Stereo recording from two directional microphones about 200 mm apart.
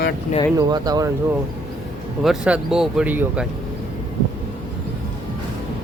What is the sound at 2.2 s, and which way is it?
Speech, 5° right (ahead or behind).